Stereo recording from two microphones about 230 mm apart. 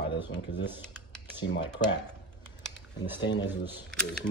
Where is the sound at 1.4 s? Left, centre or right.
Left.